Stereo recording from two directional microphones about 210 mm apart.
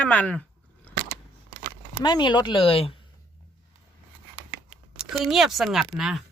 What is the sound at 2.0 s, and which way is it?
Speech, 20° left (ahead or behind).